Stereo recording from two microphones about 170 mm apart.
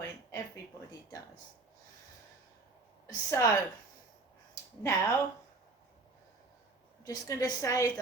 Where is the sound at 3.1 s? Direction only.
20° left (ahead or behind).